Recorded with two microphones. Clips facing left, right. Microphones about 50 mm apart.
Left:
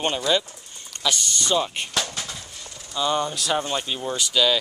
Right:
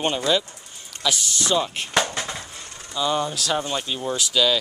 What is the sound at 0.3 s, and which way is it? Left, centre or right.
Speech, centre.